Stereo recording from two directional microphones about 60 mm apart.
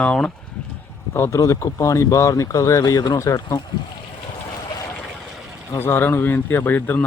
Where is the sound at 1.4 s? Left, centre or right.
Left.